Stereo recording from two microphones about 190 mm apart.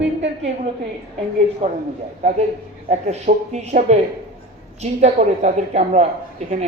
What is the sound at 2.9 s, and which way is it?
A woman's voice, 35° right (ahead or behind).